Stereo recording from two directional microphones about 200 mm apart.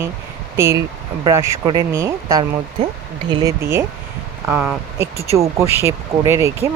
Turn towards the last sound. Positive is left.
turn(degrees=-15)  # may be behind; listen again after turning